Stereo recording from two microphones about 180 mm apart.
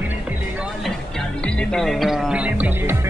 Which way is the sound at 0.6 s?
Centre (ahead or behind).